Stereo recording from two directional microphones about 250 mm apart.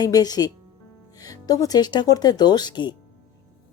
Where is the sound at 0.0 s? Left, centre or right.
Centre.